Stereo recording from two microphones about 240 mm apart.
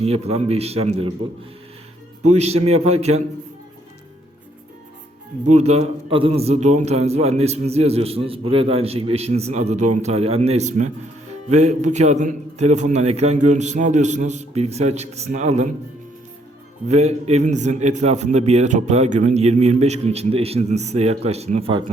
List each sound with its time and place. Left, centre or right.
0.0 s a man's voice: right
2.3 s a man's voice: right
5.5 s a man's voice: right
16.9 s a man's voice: right